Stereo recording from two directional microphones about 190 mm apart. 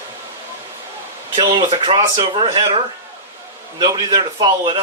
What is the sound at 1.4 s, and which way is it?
Speech, 25° right (ahead or behind).